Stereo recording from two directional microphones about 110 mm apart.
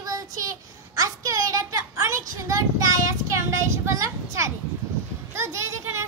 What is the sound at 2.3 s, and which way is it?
Child singing, 30° right (ahead or behind).